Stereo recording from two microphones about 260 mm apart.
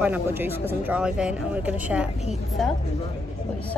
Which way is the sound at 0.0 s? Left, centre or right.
Centre.